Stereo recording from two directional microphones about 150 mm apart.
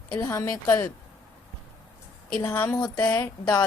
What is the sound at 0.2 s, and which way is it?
Speech, 20° left (ahead or behind).